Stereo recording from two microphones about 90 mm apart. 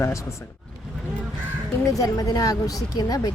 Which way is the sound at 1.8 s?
40° left (ahead or behind).